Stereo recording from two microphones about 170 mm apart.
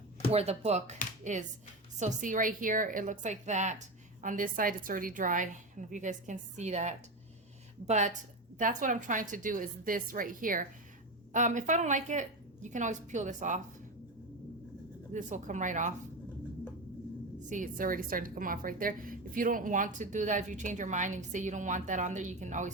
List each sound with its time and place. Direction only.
0.3 s a woman's voice: 40° right (ahead or behind)
15.1 s a woman's voice: 45° right (ahead or behind)
17.5 s a woman's voice: 50° right (ahead or behind)